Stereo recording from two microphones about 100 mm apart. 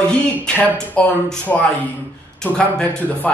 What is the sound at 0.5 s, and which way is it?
A man's voice, 15° left (ahead or behind).